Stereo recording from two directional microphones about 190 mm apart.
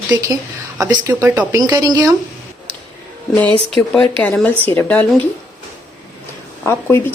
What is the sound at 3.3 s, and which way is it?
Speech, 10° left (ahead or behind).